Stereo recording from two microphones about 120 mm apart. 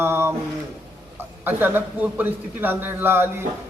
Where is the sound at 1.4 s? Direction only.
15° right (ahead or behind).